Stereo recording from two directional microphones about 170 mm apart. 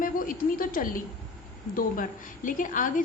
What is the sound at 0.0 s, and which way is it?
A woman's voice, 55° left (ahead or behind).